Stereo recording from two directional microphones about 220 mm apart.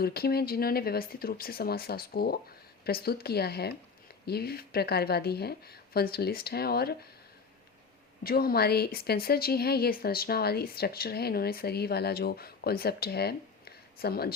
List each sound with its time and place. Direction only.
0.0 s speech: 45° left (ahead or behind)
8.2 s speech: 40° left (ahead or behind)